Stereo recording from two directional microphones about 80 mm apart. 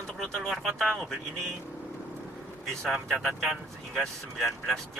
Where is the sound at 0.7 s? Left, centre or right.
Centre.